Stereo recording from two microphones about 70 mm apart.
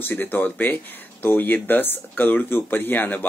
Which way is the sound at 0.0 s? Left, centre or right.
Left.